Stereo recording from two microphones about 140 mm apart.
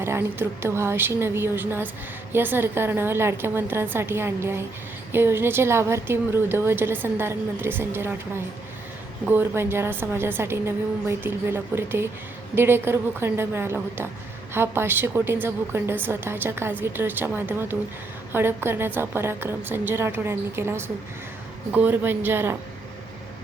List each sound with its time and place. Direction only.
0.0 s a woman's voice: 15° right (ahead or behind)